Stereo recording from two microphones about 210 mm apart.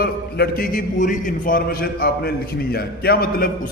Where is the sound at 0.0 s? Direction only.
45° left (ahead or behind).